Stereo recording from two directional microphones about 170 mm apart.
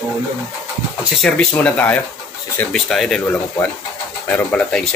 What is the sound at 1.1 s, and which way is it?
Speech, 5° left (ahead or behind).